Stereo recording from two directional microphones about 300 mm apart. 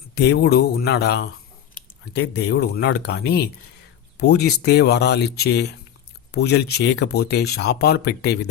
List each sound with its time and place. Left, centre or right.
0.2 s speech: left